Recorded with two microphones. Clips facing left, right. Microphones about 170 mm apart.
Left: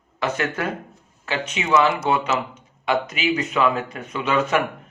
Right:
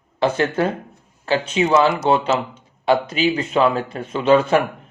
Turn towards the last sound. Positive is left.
turn(degrees=-30)  # may be behind; listen again after turning